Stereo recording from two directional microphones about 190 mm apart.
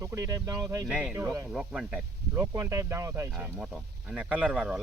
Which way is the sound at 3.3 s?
5° right (ahead or behind).